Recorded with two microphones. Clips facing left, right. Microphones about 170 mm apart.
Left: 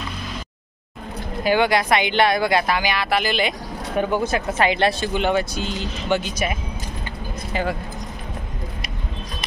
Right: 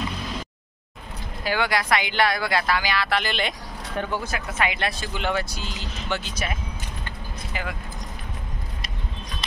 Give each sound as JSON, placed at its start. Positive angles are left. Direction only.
{"t": 1.4, "sound": "speech", "side_deg": 20}
{"t": 4.5, "sound": "speech", "side_deg": 30}
{"t": 5.1, "sound": "speech", "side_deg": 20}